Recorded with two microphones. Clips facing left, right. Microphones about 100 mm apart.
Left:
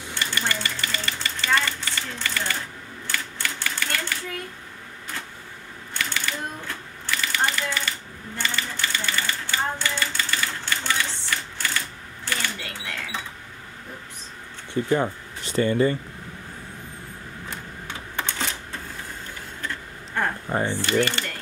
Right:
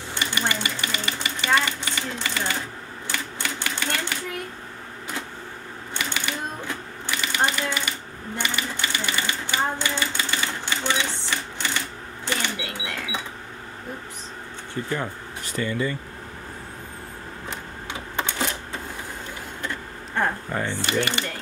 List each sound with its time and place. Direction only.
0.1 s a sound: 20° right (ahead or behind)
3.1 s typewriter: 20° right (ahead or behind)
5.9 s typewriter: 20° right (ahead or behind)
12.3 s cash register: 15° right (ahead or behind)
14.7 s speech: 25° left (ahead or behind)
15.5 s speech: 40° left (ahead or behind)
17.8 s typewriter: 15° right (ahead or behind)
20.5 s a sound: 20° left (ahead or behind)
20.8 s speech: 20° right (ahead or behind)